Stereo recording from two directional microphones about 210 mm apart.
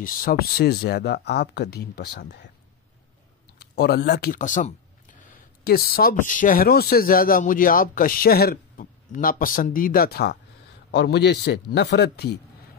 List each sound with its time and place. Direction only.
0.0 s speech: 40° left (ahead or behind)
3.5 s speech: 50° left (ahead or behind)